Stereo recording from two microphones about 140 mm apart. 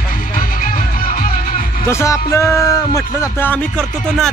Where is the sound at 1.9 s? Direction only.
20° left (ahead or behind).